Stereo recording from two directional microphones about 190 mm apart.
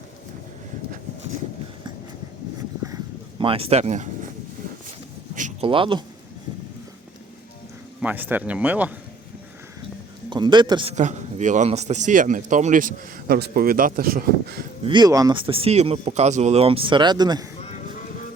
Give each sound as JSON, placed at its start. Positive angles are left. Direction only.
{"t": 2.8, "sound": "a sound", "side_deg": -20}
{"t": 5.3, "sound": "a sound", "side_deg": -40}
{"t": 8.0, "sound": "speech", "side_deg": -10}
{"t": 10.2, "sound": "a man's voice", "side_deg": -25}
{"t": 10.9, "sound": "speech", "side_deg": -40}
{"t": 14.8, "sound": "speech", "side_deg": -20}